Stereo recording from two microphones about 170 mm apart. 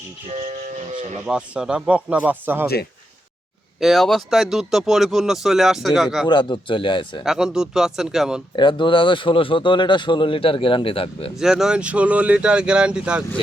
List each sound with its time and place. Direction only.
0.3 s speech: 40° right (ahead or behind)
1.3 s speech: 5° right (ahead or behind)
3.8 s speech: centre (ahead or behind)
6.2 s speech: 25° left (ahead or behind)
7.3 s speech: 5° right (ahead or behind)
8.5 s speech: 30° left (ahead or behind)
11.3 s speech: 5° right (ahead or behind)